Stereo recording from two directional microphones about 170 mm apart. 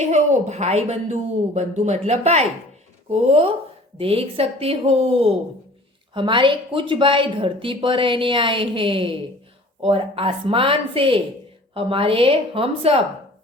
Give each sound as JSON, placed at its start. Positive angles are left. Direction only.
{"t": 0.0, "sound": "a woman's voice", "side_deg": -40}